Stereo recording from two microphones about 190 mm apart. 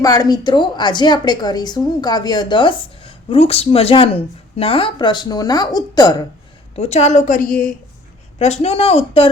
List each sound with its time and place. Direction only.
0.0 s a woman's voice: 20° left (ahead or behind)
6.7 s a woman's voice: 35° left (ahead or behind)
8.4 s speech: 35° left (ahead or behind)